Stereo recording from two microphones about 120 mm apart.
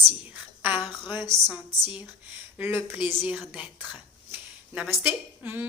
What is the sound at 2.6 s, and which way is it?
Speech, 20° right (ahead or behind).